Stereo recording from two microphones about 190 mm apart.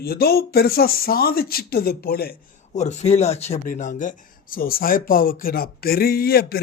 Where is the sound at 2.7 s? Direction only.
35° left (ahead or behind).